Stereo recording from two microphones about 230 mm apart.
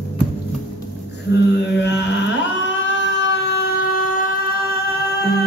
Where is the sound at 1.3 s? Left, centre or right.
Left.